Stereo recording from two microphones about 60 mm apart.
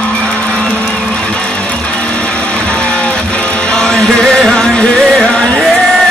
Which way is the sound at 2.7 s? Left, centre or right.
Centre.